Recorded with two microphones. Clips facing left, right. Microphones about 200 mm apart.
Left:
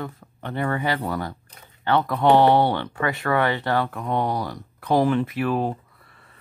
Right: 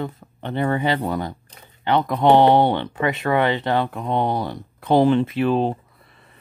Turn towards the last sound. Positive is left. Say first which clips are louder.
# right 2 dB
turn(degrees=-20)  # may be behind; listen again after turning